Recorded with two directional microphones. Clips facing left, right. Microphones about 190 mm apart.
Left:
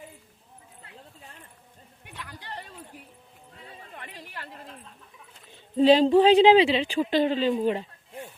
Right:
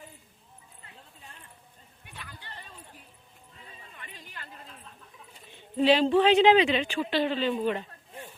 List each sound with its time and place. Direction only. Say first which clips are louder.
2.0 s a sound: left 5 dB; 75° left (ahead or behind)
3.6 s horse: left 6 dB; 70° left (ahead or behind)
5.7 s speech: left 4 dB; 40° left (ahead or behind)